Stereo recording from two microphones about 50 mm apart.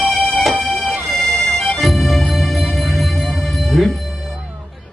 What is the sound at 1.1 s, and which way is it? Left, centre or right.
Music, centre.